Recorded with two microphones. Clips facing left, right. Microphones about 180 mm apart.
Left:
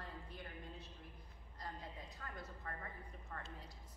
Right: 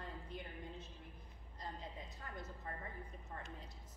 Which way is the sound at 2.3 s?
20° right (ahead or behind).